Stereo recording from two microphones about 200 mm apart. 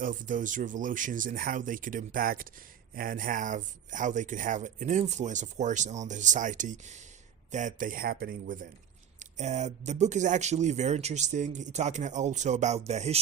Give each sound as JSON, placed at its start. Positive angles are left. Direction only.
{"t": 0.0, "sound": "speech", "side_deg": -40}
{"t": 9.1, "sound": "speech", "side_deg": -35}